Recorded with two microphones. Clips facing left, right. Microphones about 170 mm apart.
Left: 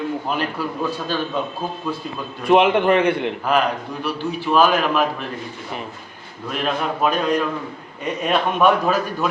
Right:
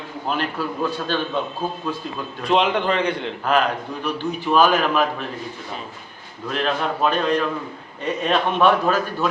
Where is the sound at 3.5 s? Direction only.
5° left (ahead or behind).